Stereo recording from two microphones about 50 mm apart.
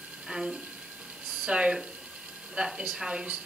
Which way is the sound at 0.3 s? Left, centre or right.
Centre.